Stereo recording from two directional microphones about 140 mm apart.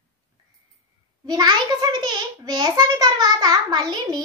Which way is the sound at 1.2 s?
30° right (ahead or behind).